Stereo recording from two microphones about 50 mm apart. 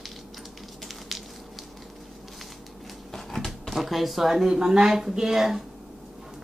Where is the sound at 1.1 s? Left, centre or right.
Centre.